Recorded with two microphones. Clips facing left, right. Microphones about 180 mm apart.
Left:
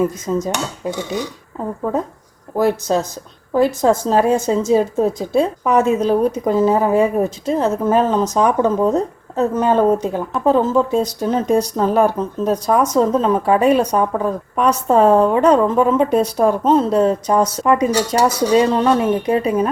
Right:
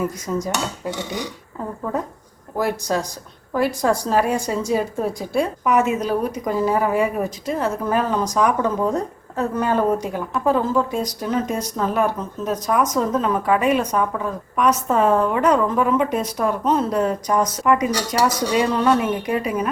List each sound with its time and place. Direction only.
0.0 s a woman's voice: 25° left (ahead or behind)
2.6 s a woman's voice: 25° left (ahead or behind)
18.3 s dishes: 10° left (ahead or behind)
18.5 s a woman's voice: 30° left (ahead or behind)